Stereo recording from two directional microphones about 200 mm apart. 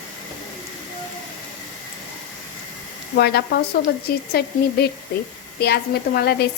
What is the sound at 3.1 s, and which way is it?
A woman's voice, 55° left (ahead or behind).